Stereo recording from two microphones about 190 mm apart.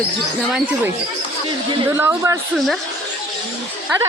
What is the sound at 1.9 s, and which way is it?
Speech, 15° right (ahead or behind).